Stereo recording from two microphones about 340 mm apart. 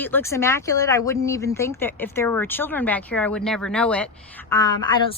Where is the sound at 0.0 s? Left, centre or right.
Centre.